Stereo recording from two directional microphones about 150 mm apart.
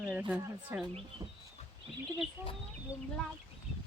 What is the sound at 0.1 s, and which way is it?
Speech, 10° right (ahead or behind).